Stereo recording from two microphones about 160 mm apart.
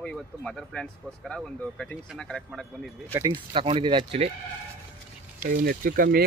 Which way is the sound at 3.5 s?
35° right (ahead or behind).